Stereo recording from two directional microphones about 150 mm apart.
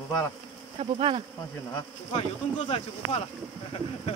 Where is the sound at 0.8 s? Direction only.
35° right (ahead or behind).